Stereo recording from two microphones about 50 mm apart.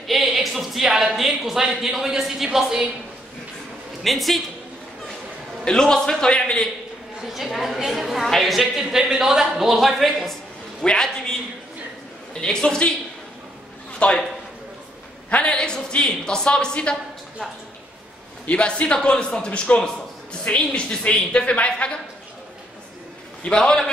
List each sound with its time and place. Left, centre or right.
0.0 s speech: centre
4.0 s speech: centre
5.7 s a man's voice: centre
7.2 s speech: centre
10.8 s a man's voice: centre
12.4 s a man's voice: centre
14.0 s a man's voice: left
15.2 s a man's voice: left
18.5 s a man's voice: left
23.4 s a man's voice: centre